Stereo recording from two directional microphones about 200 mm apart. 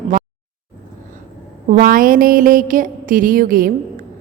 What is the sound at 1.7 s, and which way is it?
A woman's voice, 45° right (ahead or behind).